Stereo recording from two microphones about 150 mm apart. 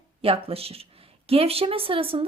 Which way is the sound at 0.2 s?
40° right (ahead or behind).